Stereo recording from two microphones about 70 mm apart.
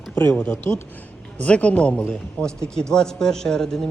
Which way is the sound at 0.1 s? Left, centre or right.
Left.